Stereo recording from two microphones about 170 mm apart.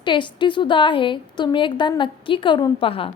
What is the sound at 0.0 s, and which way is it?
A woman's voice, 30° left (ahead or behind).